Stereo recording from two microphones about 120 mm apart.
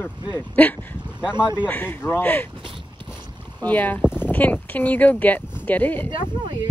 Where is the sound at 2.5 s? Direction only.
45° right (ahead or behind).